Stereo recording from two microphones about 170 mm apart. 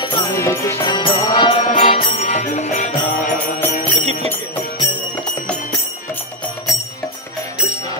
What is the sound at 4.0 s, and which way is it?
Jingle bell, 40° right (ahead or behind).